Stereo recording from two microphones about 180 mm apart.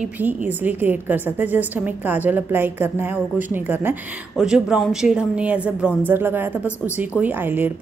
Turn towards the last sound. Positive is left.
turn(degrees=-10)  # may be behind; listen again after turning